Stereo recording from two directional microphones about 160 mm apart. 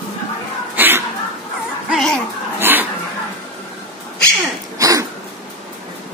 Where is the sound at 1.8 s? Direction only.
Centre (ahead or behind).